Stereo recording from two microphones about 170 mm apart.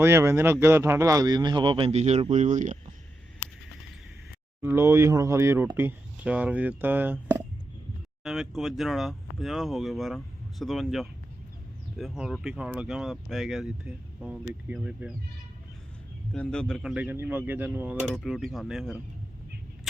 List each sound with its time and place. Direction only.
0.0 s speech: 15° right (ahead or behind); by 2.7 s 45° right (ahead or behind)
4.6 s speech: 15° right (ahead or behind)
8.2 s speech: centre (ahead or behind)
16.3 s speech: 5° left (ahead or behind)